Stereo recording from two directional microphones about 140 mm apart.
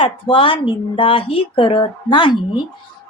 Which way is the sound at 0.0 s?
40° left (ahead or behind).